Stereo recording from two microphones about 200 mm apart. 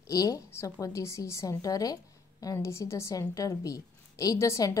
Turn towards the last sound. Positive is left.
turn(degrees=15)  # may be behind; listen again after turning